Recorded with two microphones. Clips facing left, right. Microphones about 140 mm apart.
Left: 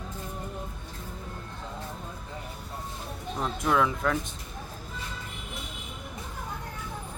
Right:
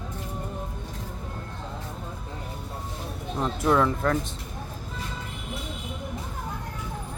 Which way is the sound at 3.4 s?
Centre (ahead or behind).